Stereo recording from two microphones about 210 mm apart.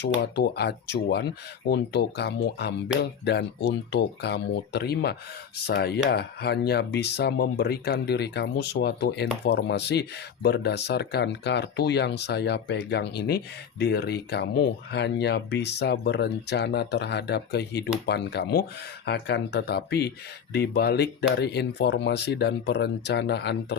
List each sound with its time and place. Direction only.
0.3 s speech: 50° left (ahead or behind)